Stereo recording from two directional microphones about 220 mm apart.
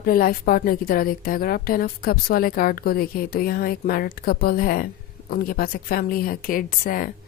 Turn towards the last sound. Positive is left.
turn(degrees=40)  # may be behind; listen again after turning